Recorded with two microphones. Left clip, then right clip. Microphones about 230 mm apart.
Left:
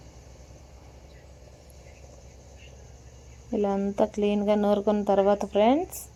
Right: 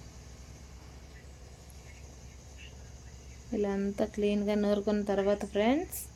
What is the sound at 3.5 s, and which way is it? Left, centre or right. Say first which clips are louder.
Speech: left 6 dB; centre.